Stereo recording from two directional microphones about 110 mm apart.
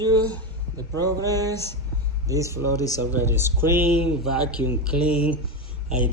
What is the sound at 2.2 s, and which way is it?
Speech, 30° right (ahead or behind).